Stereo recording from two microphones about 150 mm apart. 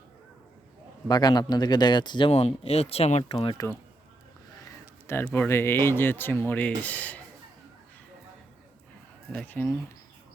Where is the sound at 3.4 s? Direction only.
25° left (ahead or behind).